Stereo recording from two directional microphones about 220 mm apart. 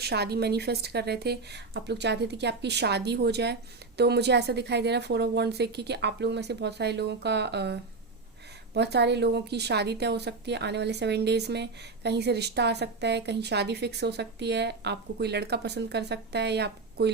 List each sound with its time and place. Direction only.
0.0 s a woman's voice: 45° right (ahead or behind)